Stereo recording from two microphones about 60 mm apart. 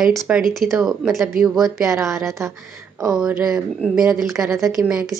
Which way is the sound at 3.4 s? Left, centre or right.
Centre.